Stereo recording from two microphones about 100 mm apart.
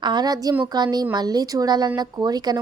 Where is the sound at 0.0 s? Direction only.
45° right (ahead or behind).